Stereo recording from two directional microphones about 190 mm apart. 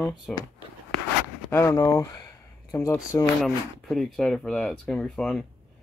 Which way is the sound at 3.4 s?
Centre (ahead or behind).